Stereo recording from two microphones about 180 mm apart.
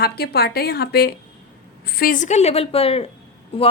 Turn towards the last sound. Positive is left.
turn(degrees=30)  # may be behind; listen again after turning